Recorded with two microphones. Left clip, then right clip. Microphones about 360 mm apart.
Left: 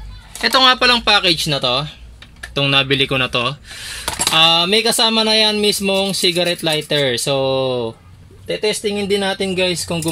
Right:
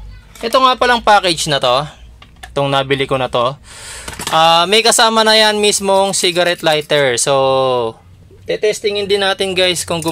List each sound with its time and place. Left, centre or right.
0.4 s speech: centre
2.5 s speech: centre
7.2 s speech: right